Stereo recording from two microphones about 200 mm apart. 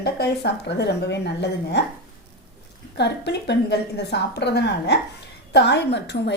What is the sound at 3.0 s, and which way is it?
A woman's voice, 55° left (ahead or behind).